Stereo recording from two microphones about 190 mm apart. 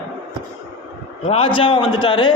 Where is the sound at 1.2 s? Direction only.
30° left (ahead or behind).